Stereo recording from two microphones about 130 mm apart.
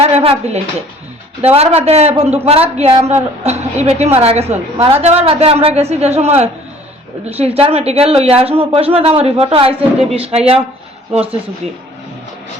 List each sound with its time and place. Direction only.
0.0 s a woman's voice: 50° right (ahead or behind)